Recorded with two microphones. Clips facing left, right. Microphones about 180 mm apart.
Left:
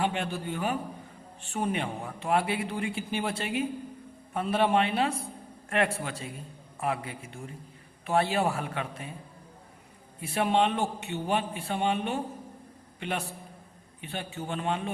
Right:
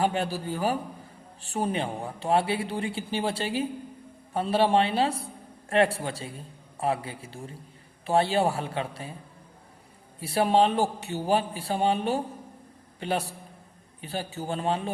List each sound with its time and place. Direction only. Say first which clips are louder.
0.0 s a man's voice: right 3 dB; 35° right (ahead or behind)
10.2 s a man's voice: right 4 dB; 35° right (ahead or behind)